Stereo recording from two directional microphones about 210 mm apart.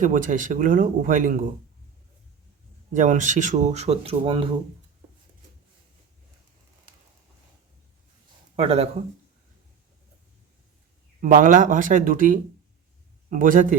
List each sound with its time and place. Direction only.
0.0 s speech: 40° right (ahead or behind)
2.9 s speech: 35° right (ahead or behind)
8.5 s speech: 30° right (ahead or behind)
11.2 s speech: 40° right (ahead or behind)